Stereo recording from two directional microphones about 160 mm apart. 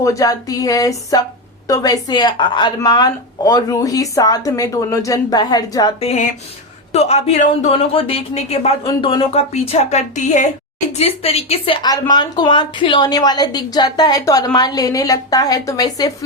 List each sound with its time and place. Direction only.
0.0 s speech: 20° left (ahead or behind)
6.0 s a woman's voice: 40° left (ahead or behind); by 16.1 s 25° left (ahead or behind)